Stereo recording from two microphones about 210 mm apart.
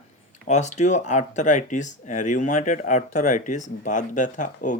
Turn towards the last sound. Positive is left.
turn(degrees=35)  # may be behind; listen again after turning